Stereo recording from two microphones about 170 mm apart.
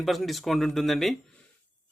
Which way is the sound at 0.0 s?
Centre (ahead or behind).